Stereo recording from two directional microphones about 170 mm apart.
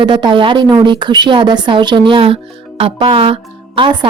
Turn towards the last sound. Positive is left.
turn(degrees=-30)  # may be behind; listen again after turning